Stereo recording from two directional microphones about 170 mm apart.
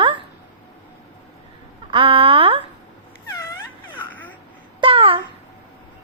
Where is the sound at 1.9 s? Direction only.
30° right (ahead or behind).